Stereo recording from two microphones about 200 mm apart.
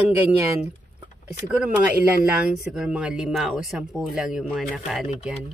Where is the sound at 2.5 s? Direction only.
Centre (ahead or behind).